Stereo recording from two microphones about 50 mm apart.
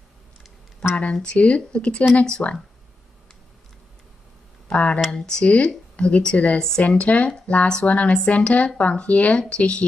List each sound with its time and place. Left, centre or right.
0.8 s speech: centre
2.4 s speech: left
4.6 s speech: left
5.1 s speech: centre
5.4 s speech: left
6.6 s speech: centre